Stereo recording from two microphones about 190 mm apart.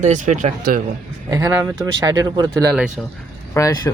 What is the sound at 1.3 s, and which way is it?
Speech, 15° right (ahead or behind).